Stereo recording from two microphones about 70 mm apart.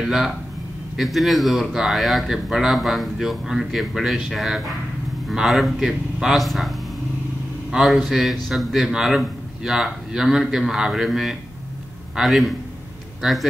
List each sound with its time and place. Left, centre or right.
0.0 s speech: centre
7.7 s speech: centre